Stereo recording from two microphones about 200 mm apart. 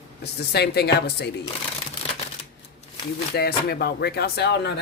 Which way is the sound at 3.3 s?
50° left (ahead or behind).